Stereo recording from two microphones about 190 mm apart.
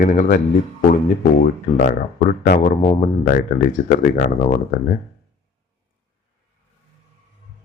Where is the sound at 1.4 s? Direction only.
45° left (ahead or behind).